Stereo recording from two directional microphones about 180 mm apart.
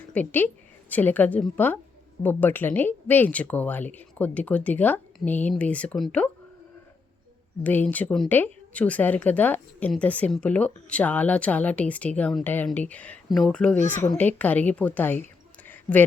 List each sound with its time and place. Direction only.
0.1 s a woman's voice: 10° left (ahead or behind)
7.6 s a woman's voice: 10° left (ahead or behind)
13.7 s speech: 45° left (ahead or behind)
14.1 s a woman's voice: 10° left (ahead or behind)
15.6 s a sound: 10° left (ahead or behind)